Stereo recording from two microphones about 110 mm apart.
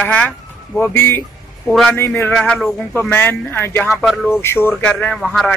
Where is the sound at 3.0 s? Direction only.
20° left (ahead or behind).